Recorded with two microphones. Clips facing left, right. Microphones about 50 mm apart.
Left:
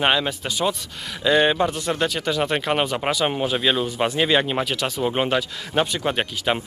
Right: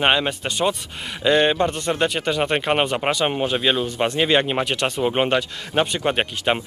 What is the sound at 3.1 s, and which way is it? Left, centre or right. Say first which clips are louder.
A man's voice: right 1 dB; centre.